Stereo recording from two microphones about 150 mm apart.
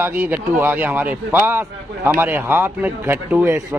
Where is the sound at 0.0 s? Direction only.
15° right (ahead or behind).